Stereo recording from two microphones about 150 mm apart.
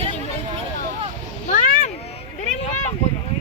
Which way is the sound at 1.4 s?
60° left (ahead or behind).